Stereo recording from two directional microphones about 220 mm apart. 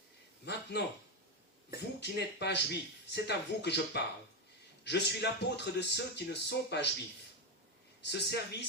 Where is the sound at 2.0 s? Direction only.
50° left (ahead or behind).